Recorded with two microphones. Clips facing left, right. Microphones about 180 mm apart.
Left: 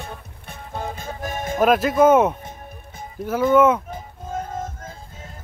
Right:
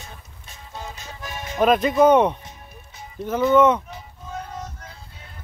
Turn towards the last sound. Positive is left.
turn(degrees=50)  # may be behind; listen again after turning